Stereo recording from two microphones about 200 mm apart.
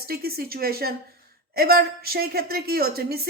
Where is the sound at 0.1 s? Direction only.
50° right (ahead or behind).